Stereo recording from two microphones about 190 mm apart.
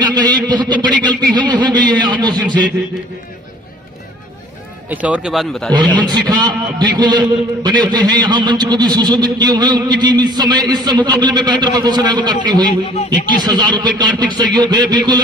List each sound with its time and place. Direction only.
0.1 s a man's voice: 25° right (ahead or behind)
4.8 s speech: 10° right (ahead or behind)
6.0 s a man's voice: 20° right (ahead or behind)